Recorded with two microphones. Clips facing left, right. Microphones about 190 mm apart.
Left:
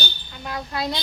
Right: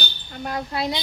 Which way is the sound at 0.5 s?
25° right (ahead or behind).